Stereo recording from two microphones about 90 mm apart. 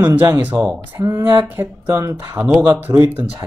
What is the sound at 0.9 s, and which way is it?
Speech, 35° right (ahead or behind).